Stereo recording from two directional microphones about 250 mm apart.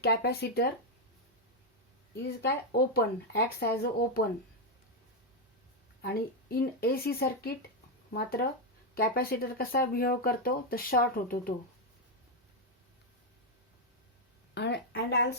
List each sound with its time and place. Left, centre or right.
0.0 s speech: left
2.4 s speech: left
6.0 s speech: left
14.5 s a sound: left